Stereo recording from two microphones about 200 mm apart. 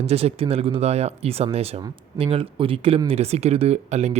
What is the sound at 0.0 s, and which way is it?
Speech, 30° right (ahead or behind).